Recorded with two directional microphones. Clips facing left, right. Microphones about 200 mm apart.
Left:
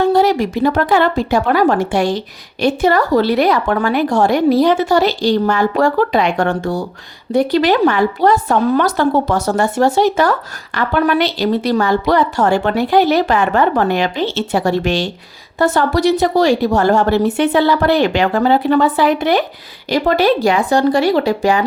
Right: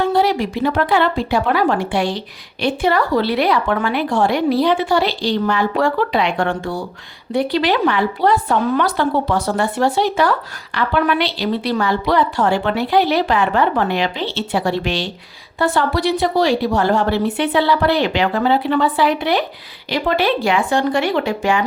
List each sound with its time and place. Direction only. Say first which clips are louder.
0.0 s speech: left 4 dB; 45° left (ahead or behind)